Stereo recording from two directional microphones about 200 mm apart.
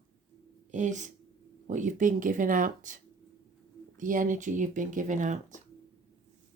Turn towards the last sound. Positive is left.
turn(degrees=-40)  # may be behind; listen again after turning